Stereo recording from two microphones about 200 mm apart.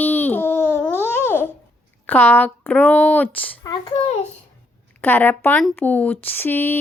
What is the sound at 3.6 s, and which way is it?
Speech, 20° left (ahead or behind).